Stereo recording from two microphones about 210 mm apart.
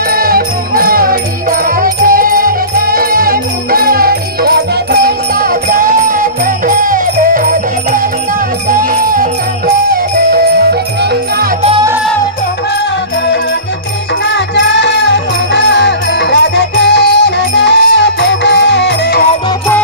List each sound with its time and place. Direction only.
0.1 s music: 45° right (ahead or behind)
14.3 s music: 55° left (ahead or behind)